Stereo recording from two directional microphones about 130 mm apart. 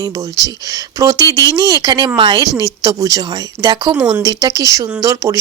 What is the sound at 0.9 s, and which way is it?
Speech, 25° right (ahead or behind).